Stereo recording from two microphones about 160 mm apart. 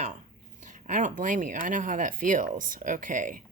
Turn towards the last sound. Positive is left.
turn(degrees=-55)  # may be behind; listen again after turning